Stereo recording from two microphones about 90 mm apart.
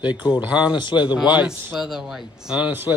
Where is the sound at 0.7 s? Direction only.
55° left (ahead or behind).